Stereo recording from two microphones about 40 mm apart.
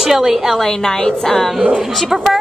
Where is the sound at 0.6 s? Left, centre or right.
Centre.